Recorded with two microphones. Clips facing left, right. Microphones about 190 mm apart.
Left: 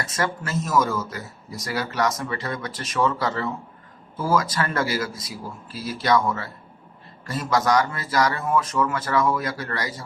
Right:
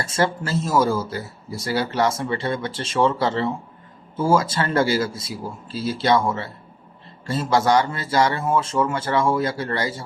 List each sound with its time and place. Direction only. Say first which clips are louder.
0.0 s speech: right 4 dB; 30° right (ahead or behind)